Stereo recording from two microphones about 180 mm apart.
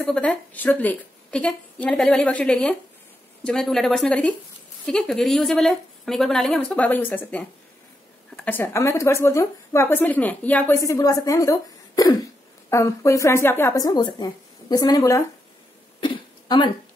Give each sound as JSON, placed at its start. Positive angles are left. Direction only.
{"t": 0.0, "sound": "a woman's voice", "side_deg": 5}
{"t": 16.0, "sound": "throat clearing", "side_deg": 25}